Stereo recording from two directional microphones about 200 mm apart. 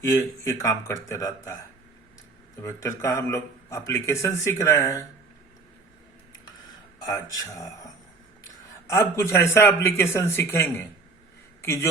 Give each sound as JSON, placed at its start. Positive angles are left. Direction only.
{"t": 0.0, "sound": "speech", "side_deg": 15}
{"t": 2.6, "sound": "speech", "side_deg": 15}
{"t": 7.0, "sound": "speech", "side_deg": 15}
{"t": 8.9, "sound": "speech", "side_deg": 15}